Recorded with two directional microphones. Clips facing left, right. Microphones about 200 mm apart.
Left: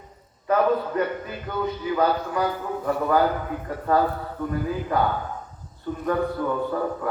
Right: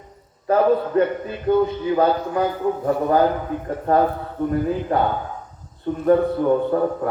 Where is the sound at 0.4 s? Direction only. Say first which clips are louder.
Right 4 dB; 30° right (ahead or behind).